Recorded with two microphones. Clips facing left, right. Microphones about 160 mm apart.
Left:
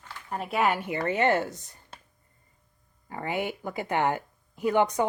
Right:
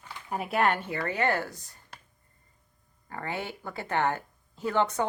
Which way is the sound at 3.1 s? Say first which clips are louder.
Left 4 dB; 15° left (ahead or behind).